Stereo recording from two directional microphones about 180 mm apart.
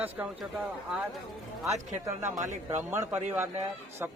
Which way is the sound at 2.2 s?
15° right (ahead or behind).